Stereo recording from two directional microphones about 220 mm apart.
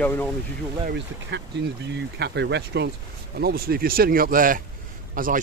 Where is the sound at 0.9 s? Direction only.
50° right (ahead or behind).